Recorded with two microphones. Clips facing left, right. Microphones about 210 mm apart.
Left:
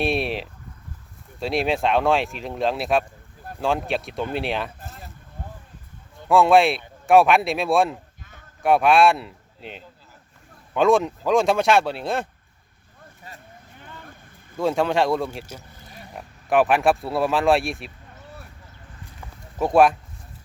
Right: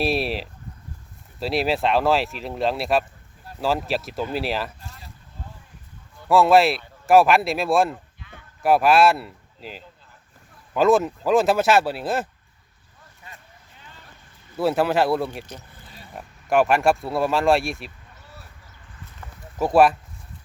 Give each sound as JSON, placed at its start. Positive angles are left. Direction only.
{"t": 0.0, "sound": "speech", "side_deg": 0}
{"t": 4.8, "sound": "a sound", "side_deg": 50}
{"t": 6.2, "sound": "speech", "side_deg": 0}
{"t": 13.7, "sound": "vehicle", "side_deg": 55}
{"t": 14.5, "sound": "speech", "side_deg": -5}
{"t": 19.5, "sound": "speech", "side_deg": 0}